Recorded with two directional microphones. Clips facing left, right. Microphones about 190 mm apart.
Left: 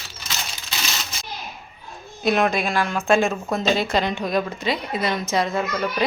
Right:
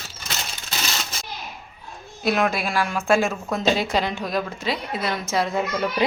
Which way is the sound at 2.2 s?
5° right (ahead or behind).